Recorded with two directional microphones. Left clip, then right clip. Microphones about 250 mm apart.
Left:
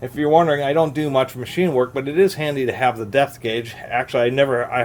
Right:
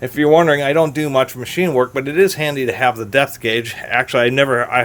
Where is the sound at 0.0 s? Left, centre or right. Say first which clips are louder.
Right 4 dB; right.